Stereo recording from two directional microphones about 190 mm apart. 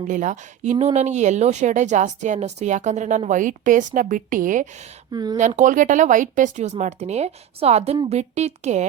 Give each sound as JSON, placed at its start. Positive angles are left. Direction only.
{"t": 0.1, "sound": "speech", "side_deg": -40}
{"t": 5.1, "sound": "speech", "side_deg": -20}
{"t": 5.4, "sound": "speech", "side_deg": -40}